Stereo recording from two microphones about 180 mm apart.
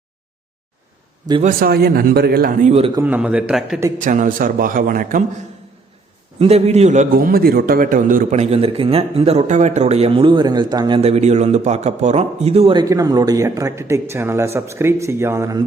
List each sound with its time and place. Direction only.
1.4 s speech: 50° right (ahead or behind)
2.6 s a man's voice: 35° right (ahead or behind)
2.9 s a man's voice: 10° right (ahead or behind)
4.0 s a man's voice: 45° right (ahead or behind)
6.4 s a man's voice: 35° right (ahead or behind); by 15.6 s 15° right (ahead or behind)